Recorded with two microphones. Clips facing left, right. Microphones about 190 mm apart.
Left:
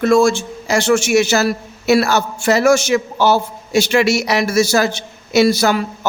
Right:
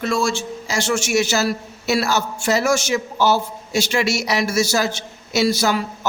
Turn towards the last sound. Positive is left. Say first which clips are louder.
# left 5 dB
turn(degrees=60)  # may be behind; listen again after turning